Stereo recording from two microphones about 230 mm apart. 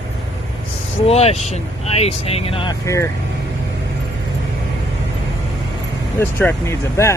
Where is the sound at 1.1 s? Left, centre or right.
Left.